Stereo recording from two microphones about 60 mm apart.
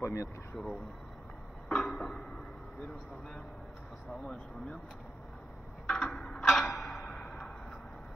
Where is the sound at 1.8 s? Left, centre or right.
Centre.